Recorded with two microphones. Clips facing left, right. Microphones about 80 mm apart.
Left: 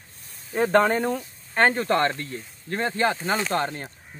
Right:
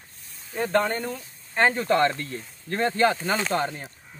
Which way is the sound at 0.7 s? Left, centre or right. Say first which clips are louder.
Left 4 dB; left.